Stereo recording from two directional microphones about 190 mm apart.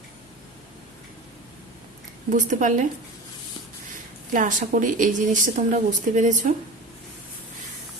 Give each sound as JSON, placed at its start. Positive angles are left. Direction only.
{"t": 2.3, "sound": "speech", "side_deg": -40}
{"t": 4.3, "sound": "speech", "side_deg": -45}